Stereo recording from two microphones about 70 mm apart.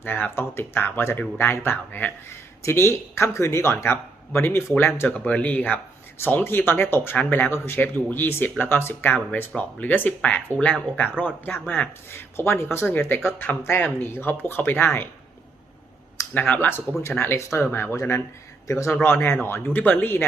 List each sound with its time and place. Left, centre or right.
0.0 s speech: left
2.6 s speech: left
5.0 s speech: left
16.3 s speech: left
18.7 s speech: left